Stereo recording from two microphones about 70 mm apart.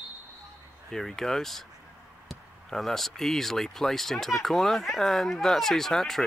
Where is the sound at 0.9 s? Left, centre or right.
Centre.